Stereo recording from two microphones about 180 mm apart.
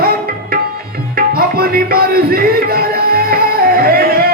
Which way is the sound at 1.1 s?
55° right (ahead or behind).